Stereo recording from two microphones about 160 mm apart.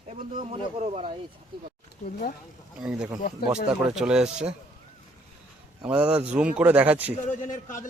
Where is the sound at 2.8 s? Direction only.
5° right (ahead or behind).